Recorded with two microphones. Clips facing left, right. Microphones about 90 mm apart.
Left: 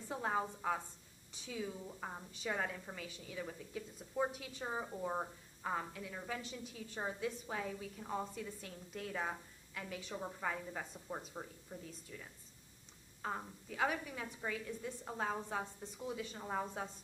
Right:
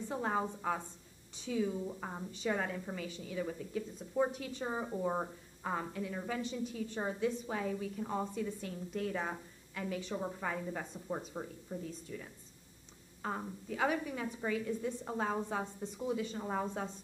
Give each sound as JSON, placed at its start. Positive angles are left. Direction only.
{"t": 0.1, "sound": "a woman's voice", "side_deg": 0}